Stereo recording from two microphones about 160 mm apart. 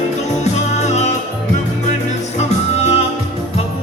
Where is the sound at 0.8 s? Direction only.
45° left (ahead or behind).